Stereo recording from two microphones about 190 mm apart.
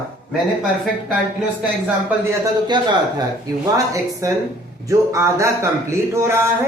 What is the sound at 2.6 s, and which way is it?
A man's voice, 25° right (ahead or behind).